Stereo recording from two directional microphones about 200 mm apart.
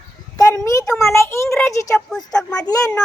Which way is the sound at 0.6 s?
15° left (ahead or behind).